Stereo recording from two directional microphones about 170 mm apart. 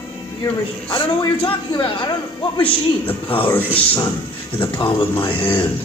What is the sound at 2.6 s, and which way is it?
A man's voice, 10° left (ahead or behind).